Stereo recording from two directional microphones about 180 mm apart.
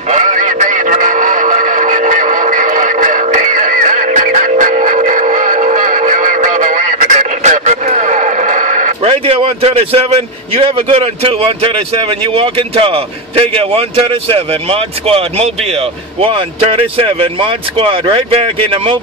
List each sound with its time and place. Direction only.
0.1 s music: 45° right (ahead or behind)
9.0 s speech: 30° right (ahead or behind)